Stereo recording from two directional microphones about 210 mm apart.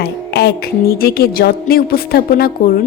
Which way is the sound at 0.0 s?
50° left (ahead or behind).